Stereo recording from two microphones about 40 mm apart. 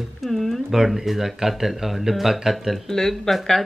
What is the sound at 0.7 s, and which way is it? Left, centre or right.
Speech, centre.